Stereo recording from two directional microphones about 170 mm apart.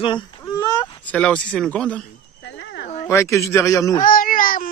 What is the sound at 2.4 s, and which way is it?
Cricket, 90° left.